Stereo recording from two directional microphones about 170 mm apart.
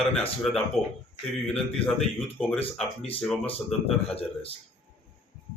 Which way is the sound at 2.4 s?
10° left (ahead or behind).